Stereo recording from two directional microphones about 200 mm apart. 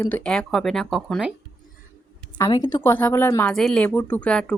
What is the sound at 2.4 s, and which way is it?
Speech, 20° left (ahead or behind).